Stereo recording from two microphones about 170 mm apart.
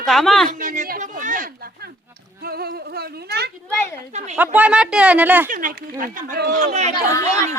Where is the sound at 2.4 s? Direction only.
65° right (ahead or behind).